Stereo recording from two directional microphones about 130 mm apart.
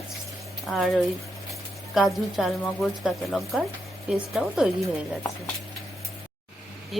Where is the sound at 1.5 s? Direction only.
Centre (ahead or behind).